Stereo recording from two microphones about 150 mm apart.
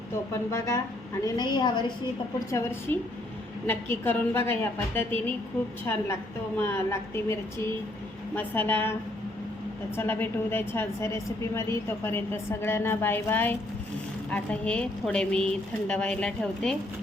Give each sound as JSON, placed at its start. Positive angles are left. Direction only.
{"t": 0.5, "sound": "a woman's voice", "side_deg": 20}
{"t": 2.5, "sound": "a woman's voice", "side_deg": 15}
{"t": 6.6, "sound": "a woman's voice", "side_deg": 15}
{"t": 8.4, "sound": "a woman's voice", "side_deg": 10}